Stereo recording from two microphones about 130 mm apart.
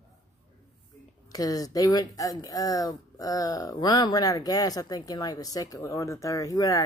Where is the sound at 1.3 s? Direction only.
30° left (ahead or behind).